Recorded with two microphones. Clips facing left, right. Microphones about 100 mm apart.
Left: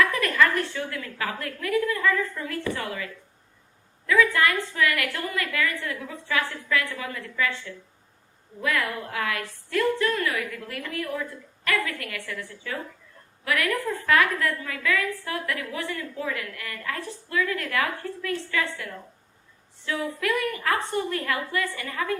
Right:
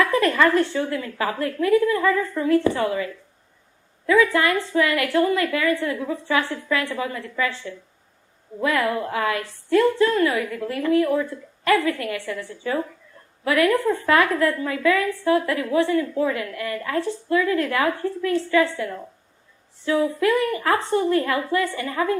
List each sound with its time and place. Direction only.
0.0 s a woman's voice: 30° right (ahead or behind)